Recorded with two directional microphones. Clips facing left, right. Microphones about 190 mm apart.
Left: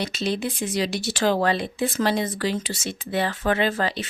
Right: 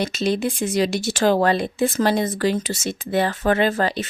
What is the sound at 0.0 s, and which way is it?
Speech, 45° right (ahead or behind).